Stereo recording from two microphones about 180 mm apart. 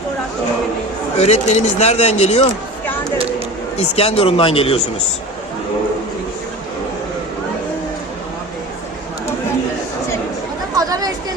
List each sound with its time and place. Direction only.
1.2 s speech: 40° left (ahead or behind)
3.8 s speech: 35° left (ahead or behind)
10.8 s chatter: 20° right (ahead or behind)